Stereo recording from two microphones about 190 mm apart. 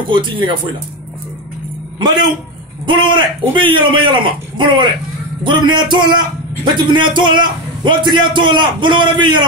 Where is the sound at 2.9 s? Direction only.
25° right (ahead or behind).